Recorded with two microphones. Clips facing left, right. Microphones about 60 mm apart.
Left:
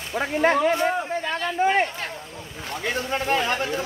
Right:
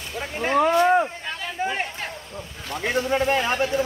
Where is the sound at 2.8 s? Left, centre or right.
Centre.